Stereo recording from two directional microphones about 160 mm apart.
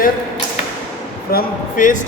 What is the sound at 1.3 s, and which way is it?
Speech, 55° left (ahead or behind).